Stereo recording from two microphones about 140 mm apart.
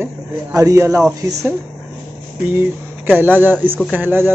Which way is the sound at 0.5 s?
25° right (ahead or behind).